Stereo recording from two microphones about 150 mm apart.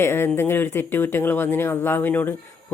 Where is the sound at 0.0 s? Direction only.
15° left (ahead or behind).